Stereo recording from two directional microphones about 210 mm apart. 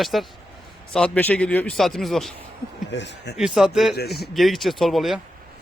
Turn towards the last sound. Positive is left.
turn(degrees=0)  # may be behind; listen again after turning